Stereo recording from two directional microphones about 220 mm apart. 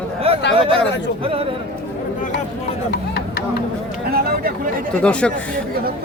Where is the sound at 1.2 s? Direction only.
25° right (ahead or behind).